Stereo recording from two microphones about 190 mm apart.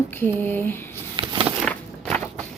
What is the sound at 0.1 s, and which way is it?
Speech, 10° left (ahead or behind).